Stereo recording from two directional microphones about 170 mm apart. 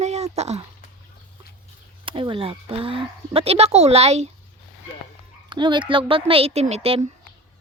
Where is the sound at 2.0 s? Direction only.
30° right (ahead or behind).